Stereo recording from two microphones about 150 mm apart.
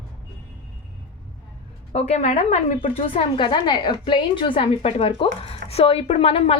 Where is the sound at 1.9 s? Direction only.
45° left (ahead or behind).